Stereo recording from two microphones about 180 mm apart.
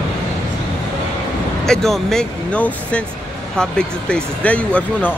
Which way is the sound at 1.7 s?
Centre (ahead or behind).